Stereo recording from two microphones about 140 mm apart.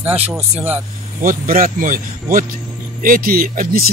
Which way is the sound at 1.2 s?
80° right.